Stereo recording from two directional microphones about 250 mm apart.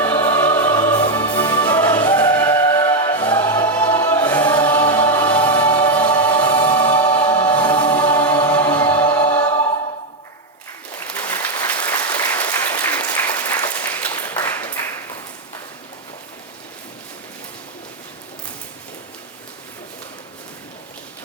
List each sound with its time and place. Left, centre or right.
0.0 s music: centre
2.1 s choir: centre
5.6 s music: centre
9.4 s choir: centre
11.2 s applause: centre